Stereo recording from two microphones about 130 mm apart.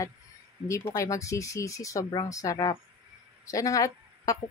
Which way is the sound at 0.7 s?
20° left (ahead or behind).